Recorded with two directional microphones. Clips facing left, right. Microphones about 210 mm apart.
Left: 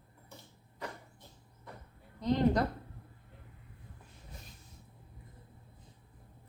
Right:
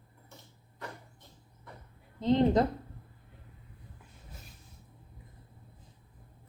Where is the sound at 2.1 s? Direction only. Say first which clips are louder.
Right 4 dB; 25° right (ahead or behind).